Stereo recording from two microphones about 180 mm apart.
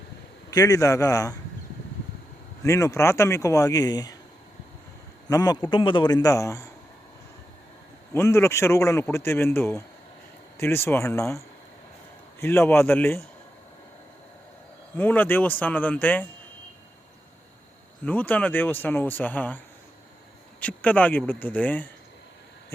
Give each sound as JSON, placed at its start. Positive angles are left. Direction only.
{"t": 0.5, "sound": "a man's voice", "side_deg": 20}
{"t": 2.6, "sound": "a man's voice", "side_deg": 15}
{"t": 5.3, "sound": "a man's voice", "side_deg": 20}
{"t": 8.1, "sound": "a man's voice", "side_deg": 15}
{"t": 14.9, "sound": "a man's voice", "side_deg": 10}
{"t": 18.0, "sound": "a man's voice", "side_deg": 10}